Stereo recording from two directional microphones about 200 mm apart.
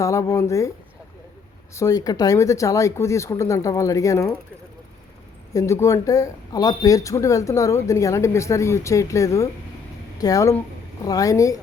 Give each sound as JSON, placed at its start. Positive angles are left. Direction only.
{"t": 0.0, "sound": "speech", "side_deg": 15}
{"t": 1.7, "sound": "speech", "side_deg": 15}
{"t": 5.5, "sound": "speech", "side_deg": 15}